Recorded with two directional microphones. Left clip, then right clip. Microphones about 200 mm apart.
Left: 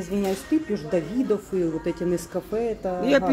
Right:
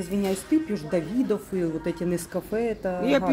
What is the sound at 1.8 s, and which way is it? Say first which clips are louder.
Speech: left 2 dB; 20° right (ahead or behind).